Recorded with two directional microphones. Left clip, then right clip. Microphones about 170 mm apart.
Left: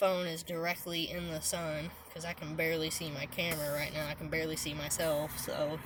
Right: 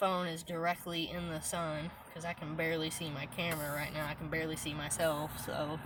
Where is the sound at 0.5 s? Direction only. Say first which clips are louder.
Right 1 dB; 25° left (ahead or behind).